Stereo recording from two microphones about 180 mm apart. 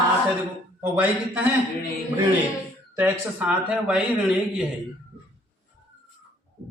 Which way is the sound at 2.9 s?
10° right (ahead or behind).